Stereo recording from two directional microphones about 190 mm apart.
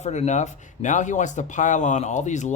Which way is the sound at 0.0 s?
35° left (ahead or behind).